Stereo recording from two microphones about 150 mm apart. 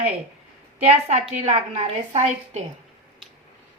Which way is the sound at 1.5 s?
50° right (ahead or behind).